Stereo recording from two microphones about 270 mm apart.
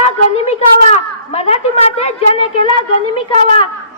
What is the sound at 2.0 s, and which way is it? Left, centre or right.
Speech, left.